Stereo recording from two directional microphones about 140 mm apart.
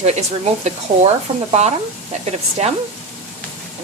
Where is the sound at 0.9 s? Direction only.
80° right.